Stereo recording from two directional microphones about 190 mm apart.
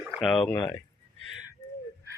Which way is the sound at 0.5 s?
20° left (ahead or behind).